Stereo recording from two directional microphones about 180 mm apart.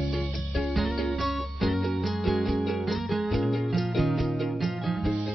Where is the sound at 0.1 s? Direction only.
Centre (ahead or behind).